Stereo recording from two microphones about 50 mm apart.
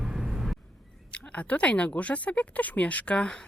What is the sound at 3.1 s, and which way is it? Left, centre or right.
Speech, centre.